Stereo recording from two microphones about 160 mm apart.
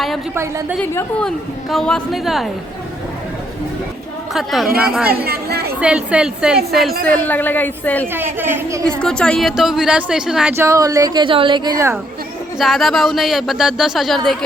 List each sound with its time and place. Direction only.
0.8 s a woman's voice: 5° left (ahead or behind)
4.4 s speech: centre (ahead or behind)
5.0 s speech: 75° right (ahead or behind)
5.8 s speech: 5° right (ahead or behind)
7.1 s a woman's voice: 10° left (ahead or behind)
8.0 s a woman's voice: 15° right (ahead or behind)
9.0 s speech: 5° left (ahead or behind)
10.6 s a woman's voice: 20° right (ahead or behind)
12.5 s speech: centre (ahead or behind)